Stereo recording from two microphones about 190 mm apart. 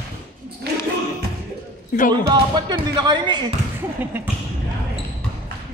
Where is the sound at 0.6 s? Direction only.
60° right (ahead or behind).